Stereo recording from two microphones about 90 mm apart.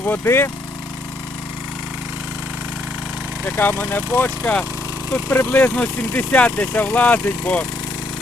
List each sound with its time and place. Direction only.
0.1 s speech: 25° left (ahead or behind)
3.6 s speech: 20° left (ahead or behind)